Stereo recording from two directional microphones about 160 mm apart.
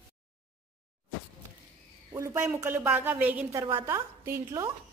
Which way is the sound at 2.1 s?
15° right (ahead or behind).